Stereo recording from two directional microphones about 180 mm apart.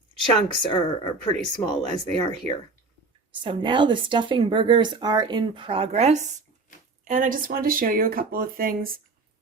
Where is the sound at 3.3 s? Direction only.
25° right (ahead or behind).